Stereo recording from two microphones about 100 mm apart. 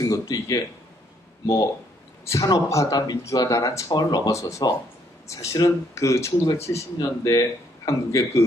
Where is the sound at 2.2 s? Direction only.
30° left (ahead or behind).